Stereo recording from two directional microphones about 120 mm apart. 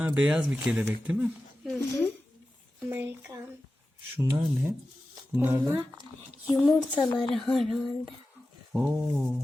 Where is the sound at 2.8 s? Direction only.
20° right (ahead or behind).